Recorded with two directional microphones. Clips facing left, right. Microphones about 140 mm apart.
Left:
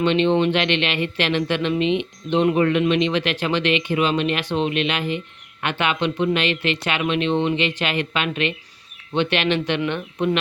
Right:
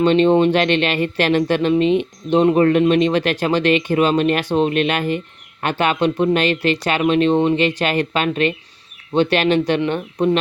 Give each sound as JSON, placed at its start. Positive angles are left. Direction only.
{"t": 0.0, "sound": "speech", "side_deg": -40}